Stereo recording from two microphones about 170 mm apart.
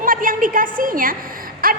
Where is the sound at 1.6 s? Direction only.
60° right (ahead or behind).